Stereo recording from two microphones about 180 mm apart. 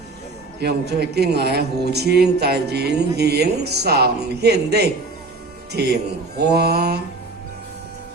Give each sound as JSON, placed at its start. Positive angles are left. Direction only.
{"t": 0.6, "sound": "a man's voice", "side_deg": -65}